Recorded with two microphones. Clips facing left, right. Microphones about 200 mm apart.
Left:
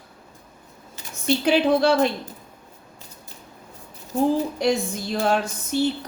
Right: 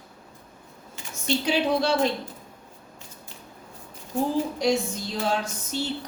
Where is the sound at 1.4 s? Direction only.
55° left (ahead or behind).